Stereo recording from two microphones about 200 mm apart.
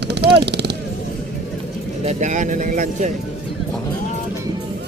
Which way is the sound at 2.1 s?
35° right (ahead or behind).